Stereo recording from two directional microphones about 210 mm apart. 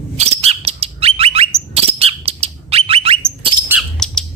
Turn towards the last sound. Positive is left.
turn(degrees=5)  # may be behind; listen again after turning